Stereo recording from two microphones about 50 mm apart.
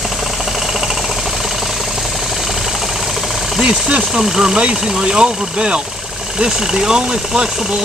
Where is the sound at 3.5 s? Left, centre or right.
Centre.